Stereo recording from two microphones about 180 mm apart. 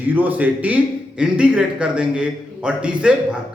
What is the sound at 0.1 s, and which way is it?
A man's voice, 10° right (ahead or behind).